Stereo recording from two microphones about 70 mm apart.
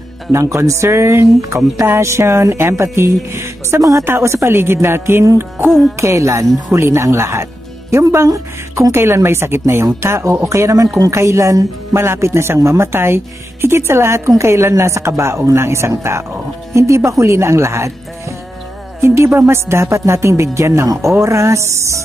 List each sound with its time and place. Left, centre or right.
0.3 s speech: right
4.0 s speech: right
12.0 s speech: right
18.9 s speech: right